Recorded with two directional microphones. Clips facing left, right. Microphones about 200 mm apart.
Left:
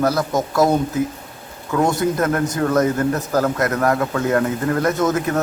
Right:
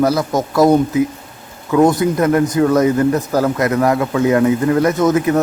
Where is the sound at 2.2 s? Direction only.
10° right (ahead or behind).